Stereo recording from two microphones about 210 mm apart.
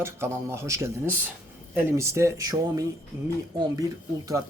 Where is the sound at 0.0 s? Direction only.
10° right (ahead or behind).